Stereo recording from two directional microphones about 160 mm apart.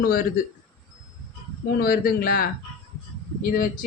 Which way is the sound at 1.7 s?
70° left (ahead or behind).